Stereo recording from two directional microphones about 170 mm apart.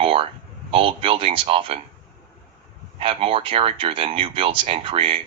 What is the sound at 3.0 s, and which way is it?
Speech, 35° right (ahead or behind).